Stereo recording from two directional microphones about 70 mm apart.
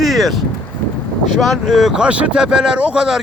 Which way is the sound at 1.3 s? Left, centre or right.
Centre.